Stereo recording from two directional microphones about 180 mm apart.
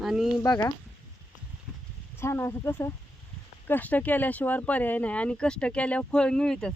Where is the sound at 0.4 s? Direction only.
20° left (ahead or behind).